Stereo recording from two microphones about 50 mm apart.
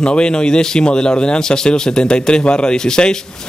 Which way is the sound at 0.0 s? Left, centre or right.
Centre.